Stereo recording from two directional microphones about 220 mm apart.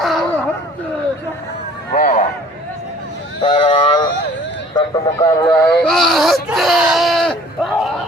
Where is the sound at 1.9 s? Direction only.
40° left (ahead or behind).